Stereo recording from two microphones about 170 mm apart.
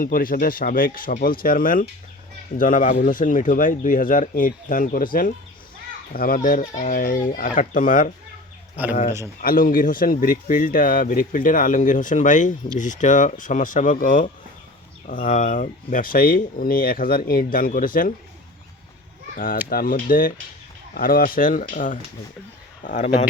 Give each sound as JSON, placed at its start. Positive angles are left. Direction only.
{"t": 0.0, "sound": "speech", "side_deg": 55}
{"t": 9.4, "sound": "speech", "side_deg": 55}
{"t": 19.7, "sound": "speech", "side_deg": 55}